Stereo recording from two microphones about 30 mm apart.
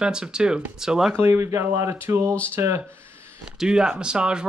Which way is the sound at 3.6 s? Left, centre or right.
Right.